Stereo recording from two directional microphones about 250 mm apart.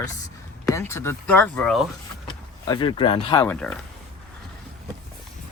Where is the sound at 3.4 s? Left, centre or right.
Centre.